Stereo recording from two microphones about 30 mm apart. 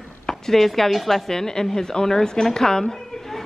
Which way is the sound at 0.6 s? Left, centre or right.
Centre.